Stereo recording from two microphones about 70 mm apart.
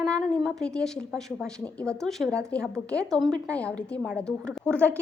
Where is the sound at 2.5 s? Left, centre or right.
Centre.